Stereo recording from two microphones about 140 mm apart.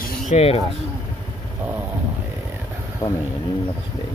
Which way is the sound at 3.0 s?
25° left (ahead or behind).